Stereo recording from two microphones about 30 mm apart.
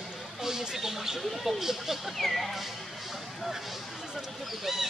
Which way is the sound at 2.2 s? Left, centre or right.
Centre.